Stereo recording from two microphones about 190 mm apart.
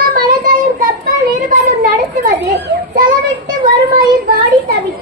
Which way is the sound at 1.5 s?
45° right (ahead or behind).